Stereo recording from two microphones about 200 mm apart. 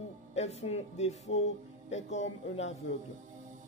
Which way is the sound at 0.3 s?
35° left (ahead or behind).